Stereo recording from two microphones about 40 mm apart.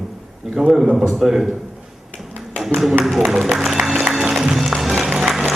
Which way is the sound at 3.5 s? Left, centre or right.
Centre.